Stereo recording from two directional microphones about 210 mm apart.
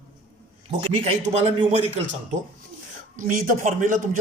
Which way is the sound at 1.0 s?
30° right (ahead or behind).